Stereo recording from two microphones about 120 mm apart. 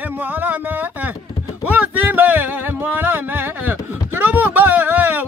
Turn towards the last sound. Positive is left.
turn(degrees=-15)  # may be behind; listen again after turning